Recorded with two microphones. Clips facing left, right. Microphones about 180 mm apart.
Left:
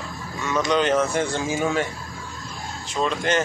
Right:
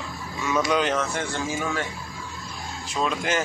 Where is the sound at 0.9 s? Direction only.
20° left (ahead or behind).